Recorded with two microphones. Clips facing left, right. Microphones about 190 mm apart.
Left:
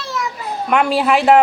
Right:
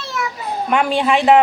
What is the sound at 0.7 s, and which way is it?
Speech, centre (ahead or behind).